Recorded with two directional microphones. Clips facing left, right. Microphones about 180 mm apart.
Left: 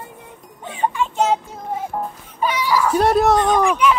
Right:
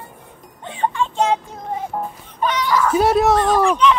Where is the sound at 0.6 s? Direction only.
10° left (ahead or behind).